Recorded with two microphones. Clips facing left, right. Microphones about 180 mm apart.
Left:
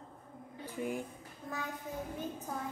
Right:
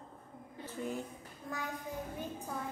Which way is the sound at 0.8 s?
15° left (ahead or behind).